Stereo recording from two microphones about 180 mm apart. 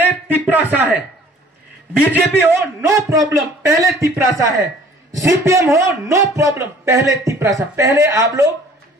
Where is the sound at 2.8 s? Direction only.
20° right (ahead or behind).